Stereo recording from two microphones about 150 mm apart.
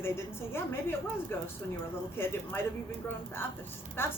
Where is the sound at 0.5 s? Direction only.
15° left (ahead or behind).